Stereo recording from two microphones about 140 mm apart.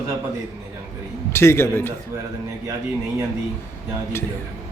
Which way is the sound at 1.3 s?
15° left (ahead or behind).